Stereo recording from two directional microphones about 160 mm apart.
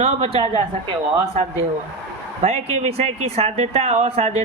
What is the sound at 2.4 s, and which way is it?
Speech, 40° right (ahead or behind).